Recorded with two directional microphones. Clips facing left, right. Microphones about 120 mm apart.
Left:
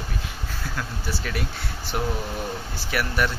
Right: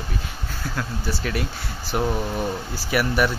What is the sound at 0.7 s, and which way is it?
Speech, centre (ahead or behind).